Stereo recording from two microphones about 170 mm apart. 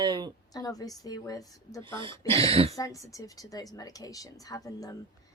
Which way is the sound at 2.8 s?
20° left (ahead or behind).